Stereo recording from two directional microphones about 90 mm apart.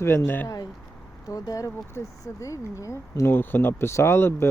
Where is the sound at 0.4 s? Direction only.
45° left (ahead or behind).